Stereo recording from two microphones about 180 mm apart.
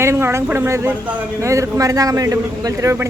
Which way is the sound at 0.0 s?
15° right (ahead or behind).